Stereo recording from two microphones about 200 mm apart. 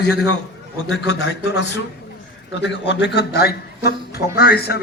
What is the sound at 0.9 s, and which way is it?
A man's voice, 60° left (ahead or behind).